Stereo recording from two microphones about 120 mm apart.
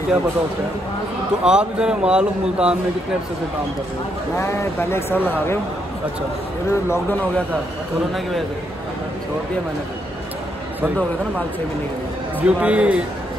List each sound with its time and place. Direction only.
1.4 s speech: 5° right (ahead or behind)
4.4 s speech: 20° left (ahead or behind)
6.7 s speech: 20° left (ahead or behind)
12.4 s speech: 10° right (ahead or behind)